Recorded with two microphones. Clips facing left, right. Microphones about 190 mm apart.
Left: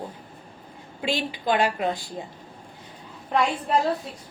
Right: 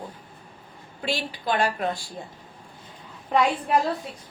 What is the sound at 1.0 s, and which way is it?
A woman's voice, 15° left (ahead or behind).